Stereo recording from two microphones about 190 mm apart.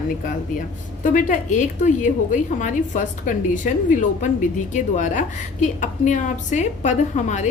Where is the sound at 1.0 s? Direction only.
40° left (ahead or behind).